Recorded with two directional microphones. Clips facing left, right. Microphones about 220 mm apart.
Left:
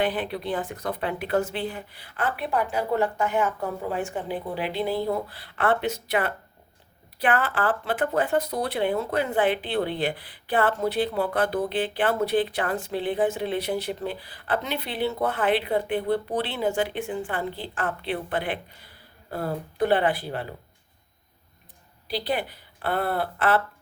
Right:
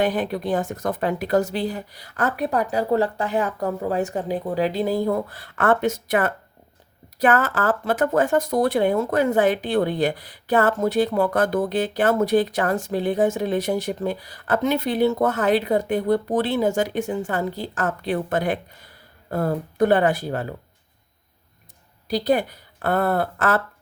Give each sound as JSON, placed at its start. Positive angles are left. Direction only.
{"t": 0.0, "sound": "speech", "side_deg": -45}
{"t": 22.0, "sound": "speech", "side_deg": -45}